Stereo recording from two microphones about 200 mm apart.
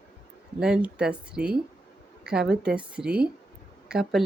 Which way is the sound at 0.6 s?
5° right (ahead or behind).